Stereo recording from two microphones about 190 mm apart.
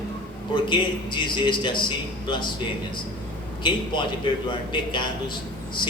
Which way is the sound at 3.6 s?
25° left (ahead or behind).